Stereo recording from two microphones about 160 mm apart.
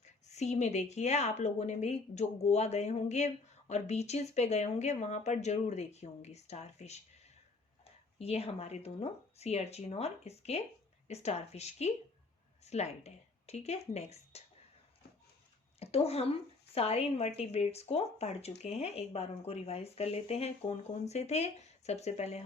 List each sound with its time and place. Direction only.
0.0 s speech: 45° left (ahead or behind)
8.2 s speech: 40° left (ahead or behind)
15.8 s speech: 40° left (ahead or behind)